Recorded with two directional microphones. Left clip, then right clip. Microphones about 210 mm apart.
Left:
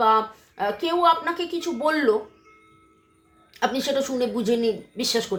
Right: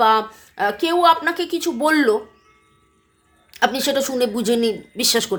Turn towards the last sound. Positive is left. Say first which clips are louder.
# right 5 dB
turn(degrees=-40)  # may be behind; listen again after turning